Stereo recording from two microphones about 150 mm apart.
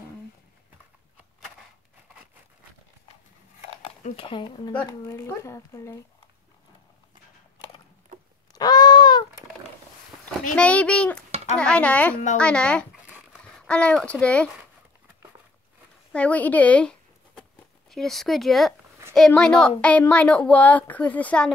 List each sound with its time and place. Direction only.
3.8 s speech: 40° left (ahead or behind)
5.0 s speech: 20° left (ahead or behind)
8.5 s a sound: 25° left (ahead or behind)
10.5 s a child's voice: 10° left (ahead or behind)
13.4 s a sound: 5° left (ahead or behind)
14.2 s a child's voice: 10° left (ahead or behind)
16.1 s a child's voice: 10° left (ahead or behind)
17.4 s a sound: centre (ahead or behind)
19.1 s a woman's voice: 5° left (ahead or behind)